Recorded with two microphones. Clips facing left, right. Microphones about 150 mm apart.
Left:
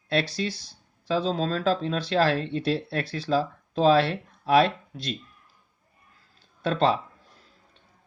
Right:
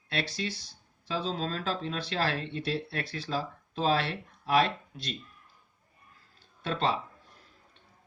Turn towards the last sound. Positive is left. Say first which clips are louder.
# left 7 dB
turn(degrees=40)  # may be behind; listen again after turning